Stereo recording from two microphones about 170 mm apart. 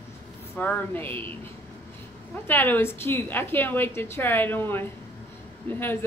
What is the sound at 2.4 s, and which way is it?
A woman's voice, 10° left (ahead or behind).